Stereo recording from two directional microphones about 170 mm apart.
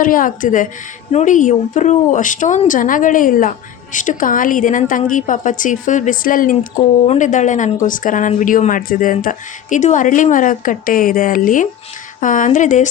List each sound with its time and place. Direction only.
0.0 s speech: 55° left (ahead or behind)
7.0 s speech: 40° left (ahead or behind)